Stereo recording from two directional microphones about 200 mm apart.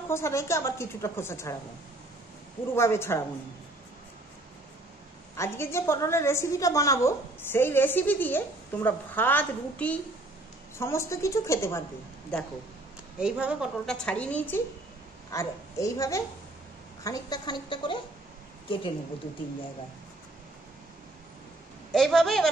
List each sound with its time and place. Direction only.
0.1 s a woman's voice: 15° left (ahead or behind)
2.7 s a woman's voice: 10° left (ahead or behind)
5.3 s a woman's voice: 15° left (ahead or behind)
13.2 s a woman's voice: 5° right (ahead or behind); by 17.9 s 25° left (ahead or behind)
21.9 s a woman's voice: centre (ahead or behind)